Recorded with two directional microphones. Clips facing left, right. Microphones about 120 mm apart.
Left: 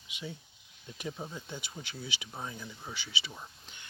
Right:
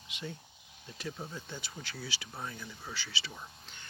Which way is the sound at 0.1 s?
10° left (ahead or behind).